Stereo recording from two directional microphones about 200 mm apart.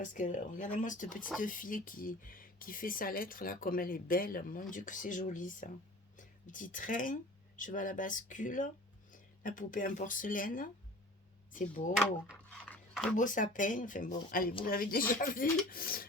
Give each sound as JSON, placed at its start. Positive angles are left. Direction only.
{"t": 0.0, "sound": "speech", "side_deg": 40}
{"t": 11.9, "sound": "a sound", "side_deg": 5}
{"t": 13.1, "sound": "speech", "side_deg": 40}